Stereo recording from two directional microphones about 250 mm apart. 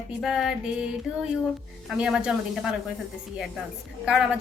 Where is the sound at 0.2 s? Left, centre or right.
Centre.